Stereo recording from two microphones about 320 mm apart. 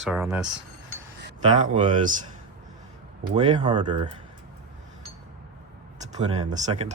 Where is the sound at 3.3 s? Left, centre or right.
Centre.